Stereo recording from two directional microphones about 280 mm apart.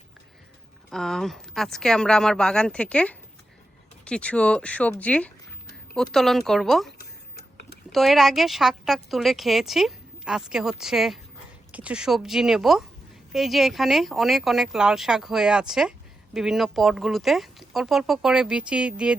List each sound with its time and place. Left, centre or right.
0.9 s speech: centre
7.0 s a sound: left
7.9 s speech: centre